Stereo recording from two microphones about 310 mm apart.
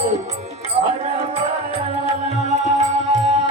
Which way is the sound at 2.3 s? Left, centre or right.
Right.